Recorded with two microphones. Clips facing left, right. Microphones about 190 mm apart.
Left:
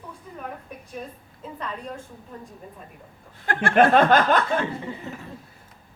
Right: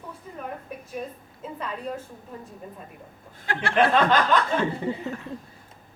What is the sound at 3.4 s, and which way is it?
Speech, 50° left (ahead or behind).